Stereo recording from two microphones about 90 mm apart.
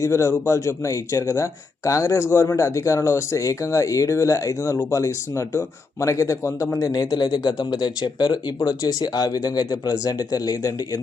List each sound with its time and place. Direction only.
0.0 s a man's voice: 35° left (ahead or behind)